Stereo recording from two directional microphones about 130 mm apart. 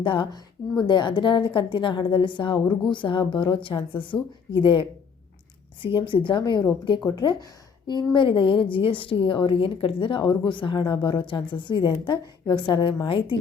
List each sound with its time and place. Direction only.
0.0 s a woman's voice: 40° left (ahead or behind)